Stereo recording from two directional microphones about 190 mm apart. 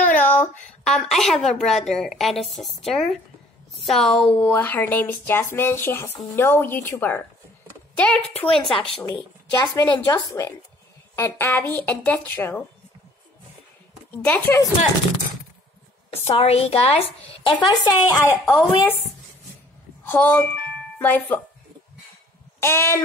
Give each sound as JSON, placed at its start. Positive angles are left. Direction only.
{"t": 0.0, "sound": "a sound", "side_deg": 45}
{"t": 0.8, "sound": "a woman's voice", "side_deg": 5}
{"t": 9.0, "sound": "speech", "side_deg": 20}
{"t": 14.1, "sound": "speech", "side_deg": 10}
{"t": 16.3, "sound": "a woman's voice", "side_deg": 30}
{"t": 18.5, "sound": "speech", "side_deg": 10}
{"t": 20.1, "sound": "speech", "side_deg": 10}
{"t": 22.6, "sound": "speech", "side_deg": 15}